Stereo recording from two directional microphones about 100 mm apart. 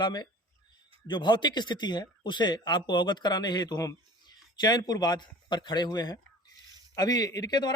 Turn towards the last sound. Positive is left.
turn(degrees=40)  # may be behind; listen again after turning